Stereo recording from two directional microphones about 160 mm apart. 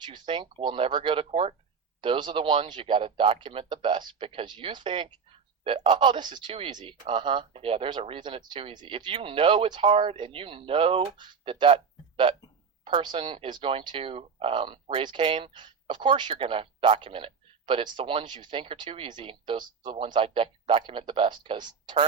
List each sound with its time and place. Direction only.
0.0 s speech: 30° right (ahead or behind)